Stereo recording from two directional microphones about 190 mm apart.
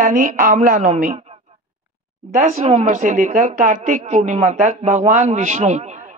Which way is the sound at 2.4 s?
40° right (ahead or behind).